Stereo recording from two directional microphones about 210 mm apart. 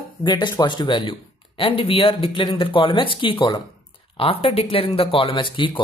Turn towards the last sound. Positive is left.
turn(degrees=25)  # may be behind; listen again after turning